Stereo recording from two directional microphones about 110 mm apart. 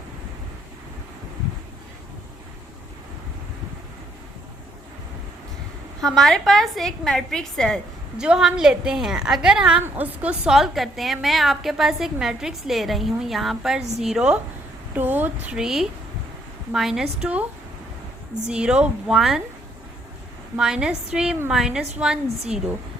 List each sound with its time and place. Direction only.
6.0 s a woman's voice: 5° left (ahead or behind)
8.2 s a woman's voice: 5° right (ahead or behind)
14.9 s a woman's voice: 15° right (ahead or behind)
15.5 s a woman's voice: 5° right (ahead or behind)
18.4 s a woman's voice: 10° right (ahead or behind)
20.6 s a woman's voice: 5° right (ahead or behind)